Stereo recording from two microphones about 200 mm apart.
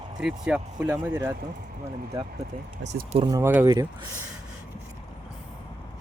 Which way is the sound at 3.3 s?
15° right (ahead or behind).